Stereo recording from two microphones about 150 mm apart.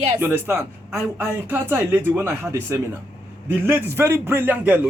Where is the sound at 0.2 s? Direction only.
15° right (ahead or behind).